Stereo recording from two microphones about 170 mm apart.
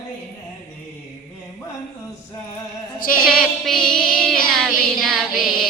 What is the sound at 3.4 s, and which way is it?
Music, 5° left (ahead or behind).